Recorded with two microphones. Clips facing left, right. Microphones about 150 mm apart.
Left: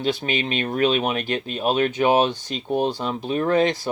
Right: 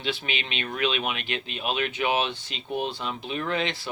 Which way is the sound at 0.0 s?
40° left (ahead or behind).